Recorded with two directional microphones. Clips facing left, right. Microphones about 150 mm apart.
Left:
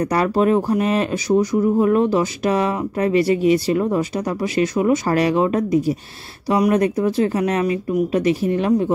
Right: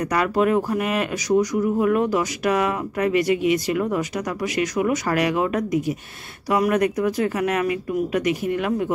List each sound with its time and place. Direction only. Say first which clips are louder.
0.0 s speech: left 3 dB; 30° left (ahead or behind)